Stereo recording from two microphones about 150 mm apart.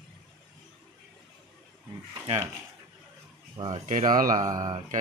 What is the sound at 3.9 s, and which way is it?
Speech, 65° right (ahead or behind).